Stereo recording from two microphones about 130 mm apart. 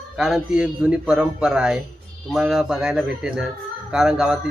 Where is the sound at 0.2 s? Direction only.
5° right (ahead or behind).